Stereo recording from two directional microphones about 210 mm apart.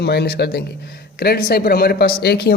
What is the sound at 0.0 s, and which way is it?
Speech, 50° left (ahead or behind).